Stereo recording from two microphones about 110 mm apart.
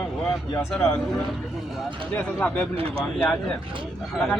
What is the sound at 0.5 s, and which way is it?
Speech, 25° left (ahead or behind).